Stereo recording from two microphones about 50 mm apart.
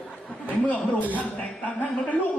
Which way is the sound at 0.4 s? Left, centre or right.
Left.